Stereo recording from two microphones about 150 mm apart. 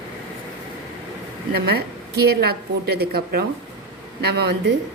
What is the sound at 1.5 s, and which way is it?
A woman's voice, 90° right.